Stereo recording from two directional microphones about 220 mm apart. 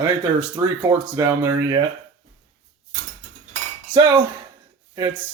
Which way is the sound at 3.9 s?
10° right (ahead or behind).